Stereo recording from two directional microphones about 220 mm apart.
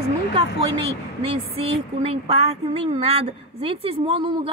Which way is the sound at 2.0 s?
25° right (ahead or behind).